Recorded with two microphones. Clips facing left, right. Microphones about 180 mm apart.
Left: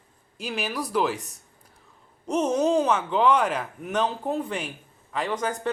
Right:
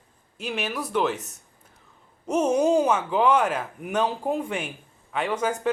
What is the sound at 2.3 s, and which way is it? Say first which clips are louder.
Speech: right 2 dB; 10° right (ahead or behind).